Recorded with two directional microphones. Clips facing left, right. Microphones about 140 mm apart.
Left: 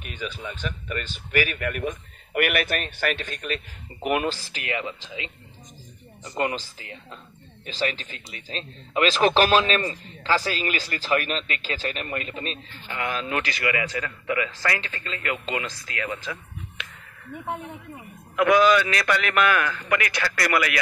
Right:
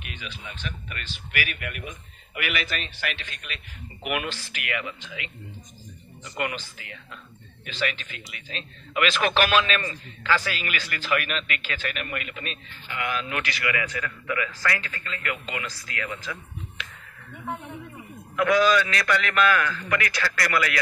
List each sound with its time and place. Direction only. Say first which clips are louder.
0.0 s a man's voice: left 6 dB; 40° left (ahead or behind); by 16.8 s 25° left (ahead or behind)
18.4 s a man's voice: left 2 dB; 20° left (ahead or behind)